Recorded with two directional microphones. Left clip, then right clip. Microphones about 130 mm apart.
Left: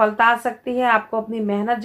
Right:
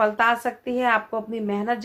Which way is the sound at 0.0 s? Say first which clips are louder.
Left 4 dB; 40° right (ahead or behind).